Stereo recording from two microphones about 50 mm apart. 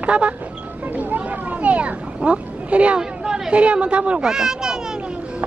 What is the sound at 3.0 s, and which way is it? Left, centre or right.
Speech, centre.